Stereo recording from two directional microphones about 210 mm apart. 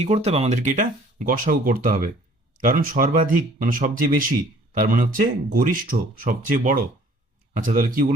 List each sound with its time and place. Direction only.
0.0 s speech: 30° right (ahead or behind)